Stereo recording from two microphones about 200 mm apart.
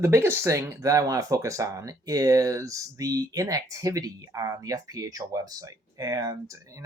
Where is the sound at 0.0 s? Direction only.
15° right (ahead or behind).